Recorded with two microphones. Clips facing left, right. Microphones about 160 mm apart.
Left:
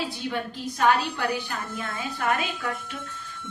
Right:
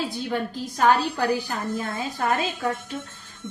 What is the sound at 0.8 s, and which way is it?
Speech, 40° right (ahead or behind).